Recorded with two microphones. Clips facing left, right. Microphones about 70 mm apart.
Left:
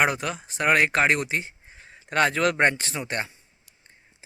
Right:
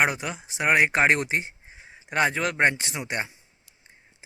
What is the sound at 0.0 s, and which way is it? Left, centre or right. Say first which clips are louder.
Speech: left 1 dB; centre.